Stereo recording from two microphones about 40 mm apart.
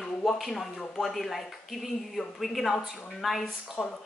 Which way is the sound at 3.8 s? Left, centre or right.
Centre.